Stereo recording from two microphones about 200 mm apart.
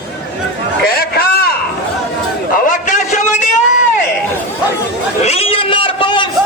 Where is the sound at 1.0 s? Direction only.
50° left (ahead or behind).